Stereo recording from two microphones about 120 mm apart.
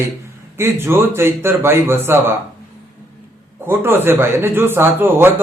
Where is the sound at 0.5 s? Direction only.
20° right (ahead or behind).